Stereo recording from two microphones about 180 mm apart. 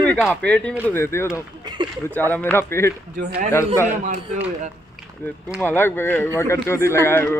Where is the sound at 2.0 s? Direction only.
10° left (ahead or behind).